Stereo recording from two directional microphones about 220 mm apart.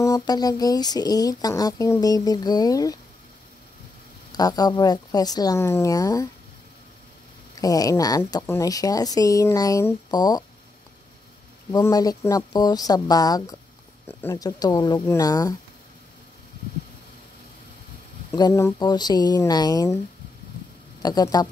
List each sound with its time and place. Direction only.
0.0 s speech: 15° left (ahead or behind)
4.3 s speech: 15° left (ahead or behind)
7.5 s speech: 15° left (ahead or behind)
11.7 s speech: 15° left (ahead or behind)
18.3 s speech: 15° left (ahead or behind)
21.0 s speech: 20° left (ahead or behind)